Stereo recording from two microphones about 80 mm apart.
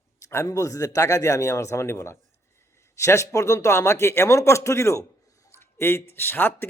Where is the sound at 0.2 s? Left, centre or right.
Left.